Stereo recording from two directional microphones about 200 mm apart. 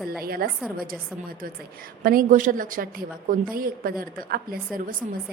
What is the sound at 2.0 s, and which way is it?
Speech, 45° right (ahead or behind).